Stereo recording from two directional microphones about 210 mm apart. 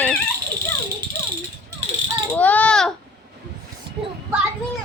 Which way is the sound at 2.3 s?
5° left (ahead or behind).